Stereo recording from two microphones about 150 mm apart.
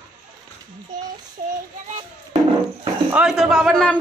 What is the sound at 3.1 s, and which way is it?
Speech, centre (ahead or behind).